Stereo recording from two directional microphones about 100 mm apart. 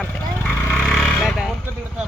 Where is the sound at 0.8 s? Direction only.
5° left (ahead or behind).